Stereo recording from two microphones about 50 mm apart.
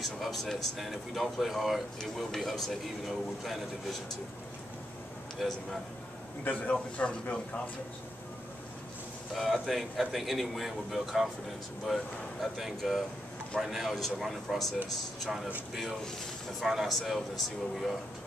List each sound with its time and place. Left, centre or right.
0.0 s a man's voice: centre
5.4 s a man's voice: centre
6.4 s a man's voice: left
9.3 s a man's voice: centre
15.7 s a man's voice: centre